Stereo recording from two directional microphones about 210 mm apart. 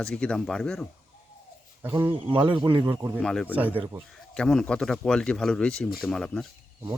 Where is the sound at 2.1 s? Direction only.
25° right (ahead or behind).